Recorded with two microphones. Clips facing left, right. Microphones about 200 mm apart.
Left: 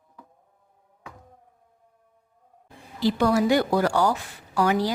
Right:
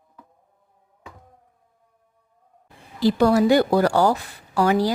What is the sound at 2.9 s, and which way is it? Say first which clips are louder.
A woman's voice: right 4 dB; 40° right (ahead or behind).